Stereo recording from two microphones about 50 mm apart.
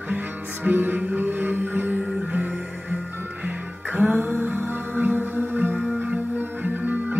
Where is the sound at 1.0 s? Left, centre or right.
Right.